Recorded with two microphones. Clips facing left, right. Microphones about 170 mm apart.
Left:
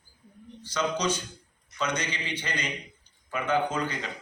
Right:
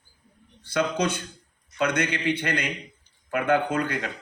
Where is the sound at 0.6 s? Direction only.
60° right (ahead or behind).